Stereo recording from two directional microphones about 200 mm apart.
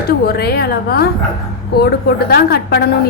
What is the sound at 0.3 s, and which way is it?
Speech, 55° left (ahead or behind).